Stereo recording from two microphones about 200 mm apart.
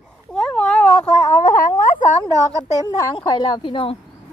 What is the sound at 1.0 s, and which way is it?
Speech, 40° left (ahead or behind).